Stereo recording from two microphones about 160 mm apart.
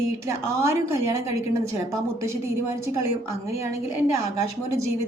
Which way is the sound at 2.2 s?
15° right (ahead or behind).